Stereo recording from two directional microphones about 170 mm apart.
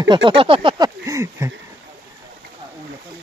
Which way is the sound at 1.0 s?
15° right (ahead or behind).